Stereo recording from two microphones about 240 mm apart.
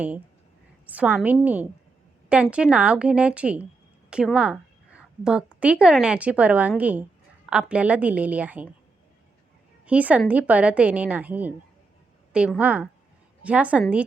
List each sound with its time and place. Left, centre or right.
0.9 s a woman's voice: centre
9.8 s a woman's voice: centre